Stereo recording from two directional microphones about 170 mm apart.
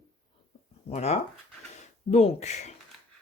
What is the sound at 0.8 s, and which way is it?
Speech, 40° left (ahead or behind).